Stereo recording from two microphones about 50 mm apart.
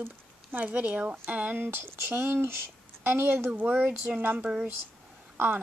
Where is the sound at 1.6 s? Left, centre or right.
Right.